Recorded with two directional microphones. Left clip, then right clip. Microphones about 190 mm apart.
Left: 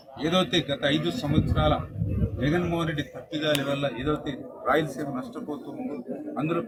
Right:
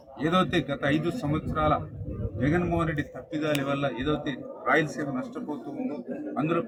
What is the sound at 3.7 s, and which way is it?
A man's voice, 5° right (ahead or behind).